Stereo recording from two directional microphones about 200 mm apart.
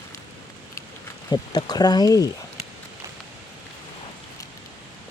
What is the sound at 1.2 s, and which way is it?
Speech, 20° left (ahead or behind).